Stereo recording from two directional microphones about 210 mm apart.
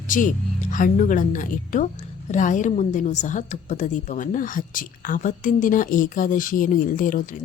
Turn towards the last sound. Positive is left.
turn(degrees=40)  # may be behind; listen again after turning